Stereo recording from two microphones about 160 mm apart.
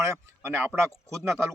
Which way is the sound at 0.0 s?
15° right (ahead or behind).